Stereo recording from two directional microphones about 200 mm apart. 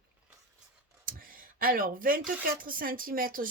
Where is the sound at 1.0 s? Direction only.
45° right (ahead or behind).